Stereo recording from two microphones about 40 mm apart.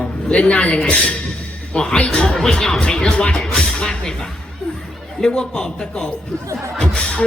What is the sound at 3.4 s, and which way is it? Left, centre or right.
Music, centre.